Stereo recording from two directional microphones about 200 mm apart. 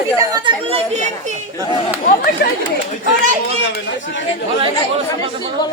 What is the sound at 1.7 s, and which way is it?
Speech, 25° left (ahead or behind).